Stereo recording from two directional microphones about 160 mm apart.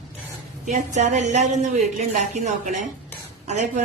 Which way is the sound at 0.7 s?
45° right (ahead or behind).